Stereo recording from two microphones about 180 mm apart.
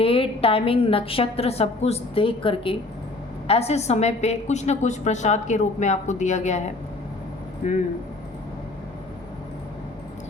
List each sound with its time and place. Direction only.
0.0 s a woman's voice: 30° left (ahead or behind)
7.6 s a woman's voice: 40° left (ahead or behind)